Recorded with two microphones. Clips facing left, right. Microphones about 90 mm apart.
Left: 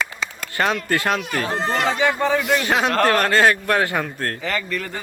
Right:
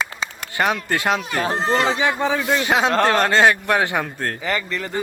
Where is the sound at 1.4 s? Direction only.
30° right (ahead or behind).